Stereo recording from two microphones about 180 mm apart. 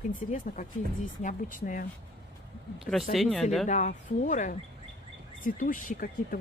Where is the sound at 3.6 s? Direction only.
40° left (ahead or behind).